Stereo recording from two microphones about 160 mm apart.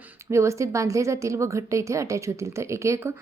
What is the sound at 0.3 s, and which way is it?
A woman's voice, 20° right (ahead or behind).